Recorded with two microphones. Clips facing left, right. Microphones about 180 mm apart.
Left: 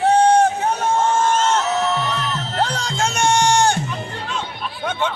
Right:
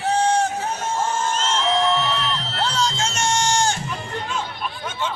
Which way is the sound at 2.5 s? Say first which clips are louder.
Left 1 dB; 55° left (ahead or behind).